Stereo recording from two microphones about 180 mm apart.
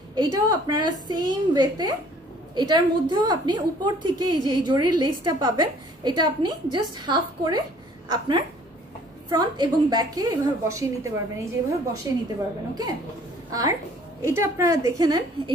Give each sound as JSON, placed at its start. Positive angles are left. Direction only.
{"t": 0.1, "sound": "a woman's voice", "side_deg": -20}
{"t": 13.5, "sound": "a woman's voice", "side_deg": -20}